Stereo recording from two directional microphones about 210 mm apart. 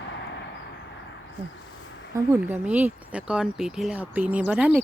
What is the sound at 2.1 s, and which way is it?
Speech, 10° right (ahead or behind).